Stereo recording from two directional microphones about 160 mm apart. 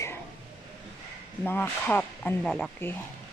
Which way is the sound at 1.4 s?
15° left (ahead or behind).